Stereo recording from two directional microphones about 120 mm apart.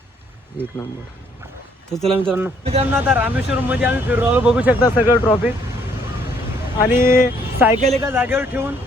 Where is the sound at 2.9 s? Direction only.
15° right (ahead or behind).